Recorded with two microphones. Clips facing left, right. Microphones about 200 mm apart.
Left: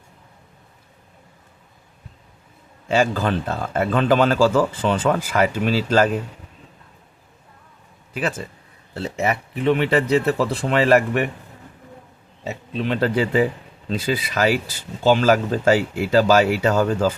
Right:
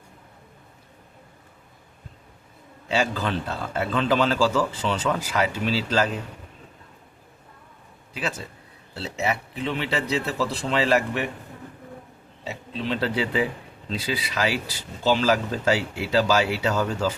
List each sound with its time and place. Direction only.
2.9 s a man's voice: 50° left (ahead or behind)
9.0 s a man's voice: 50° left (ahead or behind)
12.5 s a man's voice: 50° left (ahead or behind)